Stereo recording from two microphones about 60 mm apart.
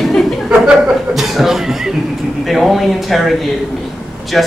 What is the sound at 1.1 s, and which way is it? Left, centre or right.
A man's voice, centre.